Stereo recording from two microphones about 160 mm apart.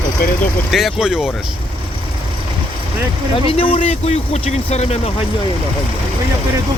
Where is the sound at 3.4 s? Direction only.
35° left (ahead or behind).